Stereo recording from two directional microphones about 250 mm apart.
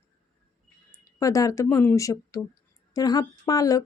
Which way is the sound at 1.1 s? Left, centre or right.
Centre.